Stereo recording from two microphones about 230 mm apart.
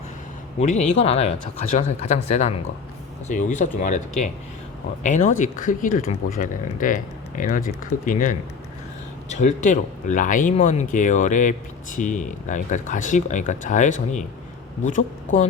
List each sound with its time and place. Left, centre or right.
0.6 s speech: left